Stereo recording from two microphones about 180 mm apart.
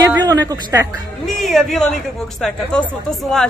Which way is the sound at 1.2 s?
Centre (ahead or behind).